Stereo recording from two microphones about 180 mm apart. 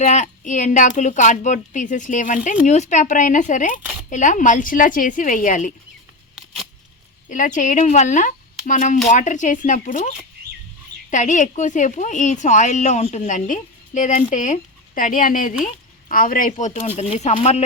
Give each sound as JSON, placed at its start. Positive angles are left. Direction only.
{"t": 0.0, "sound": "speech", "side_deg": 40}
{"t": 7.3, "sound": "speech", "side_deg": 45}